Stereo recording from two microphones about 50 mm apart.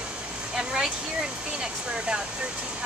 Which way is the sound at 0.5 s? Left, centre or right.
Centre.